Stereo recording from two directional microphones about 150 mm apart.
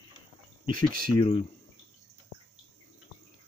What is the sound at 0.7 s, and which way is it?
Speech, 35° left (ahead or behind).